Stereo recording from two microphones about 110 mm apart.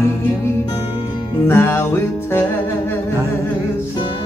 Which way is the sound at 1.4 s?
20° left (ahead or behind).